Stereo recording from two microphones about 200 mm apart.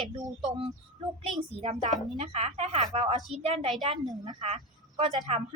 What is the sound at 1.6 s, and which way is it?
A woman's voice, 30° right (ahead or behind).